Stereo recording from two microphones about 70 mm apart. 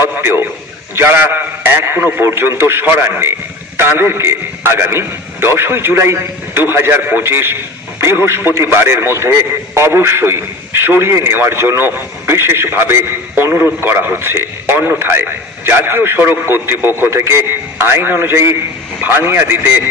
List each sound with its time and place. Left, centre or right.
0.0 s a man's voice: right